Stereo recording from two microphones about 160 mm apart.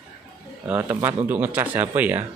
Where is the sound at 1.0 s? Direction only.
10° right (ahead or behind).